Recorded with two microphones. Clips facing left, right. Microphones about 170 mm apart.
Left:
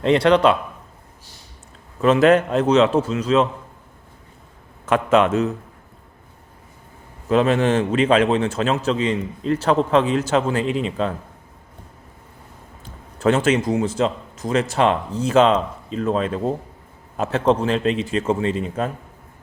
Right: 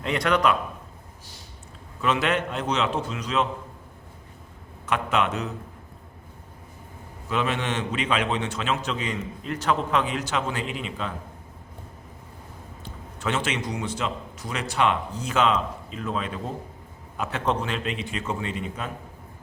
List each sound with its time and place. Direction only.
0.0 s a man's voice: 30° left (ahead or behind)
2.0 s a man's voice: 40° left (ahead or behind)
4.9 s a man's voice: 40° left (ahead or behind)
7.3 s a man's voice: 40° left (ahead or behind)
13.1 s a man's voice: 40° left (ahead or behind)